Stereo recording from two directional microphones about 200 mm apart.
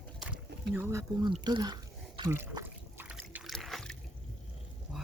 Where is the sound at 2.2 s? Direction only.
15° right (ahead or behind).